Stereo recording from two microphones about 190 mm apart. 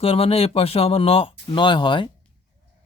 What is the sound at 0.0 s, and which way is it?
Speech, 30° left (ahead or behind).